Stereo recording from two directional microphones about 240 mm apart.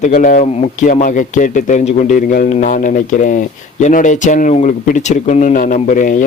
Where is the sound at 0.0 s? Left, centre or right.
Left.